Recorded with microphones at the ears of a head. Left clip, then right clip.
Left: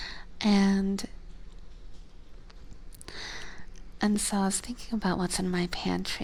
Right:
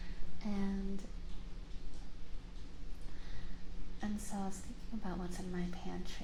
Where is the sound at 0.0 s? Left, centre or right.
Left.